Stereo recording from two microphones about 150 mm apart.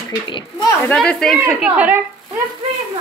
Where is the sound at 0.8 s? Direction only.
5° left (ahead or behind).